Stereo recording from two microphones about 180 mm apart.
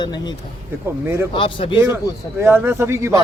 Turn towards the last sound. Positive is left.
turn(degrees=-15)  # may be behind; listen again after turning